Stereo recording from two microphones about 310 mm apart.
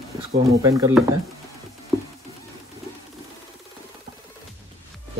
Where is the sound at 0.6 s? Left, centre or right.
Centre.